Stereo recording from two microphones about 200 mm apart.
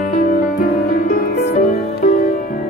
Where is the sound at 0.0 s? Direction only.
45° left (ahead or behind).